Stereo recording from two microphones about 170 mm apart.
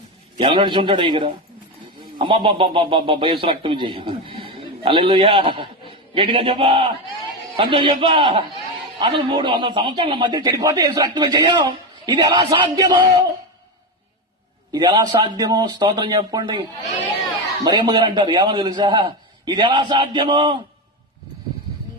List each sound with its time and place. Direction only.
0.3 s speech: 30° right (ahead or behind)
14.7 s speech: 25° right (ahead or behind)